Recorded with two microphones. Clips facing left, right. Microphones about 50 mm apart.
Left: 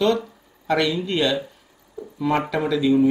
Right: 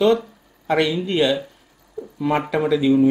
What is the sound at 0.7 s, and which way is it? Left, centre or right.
Speech, right.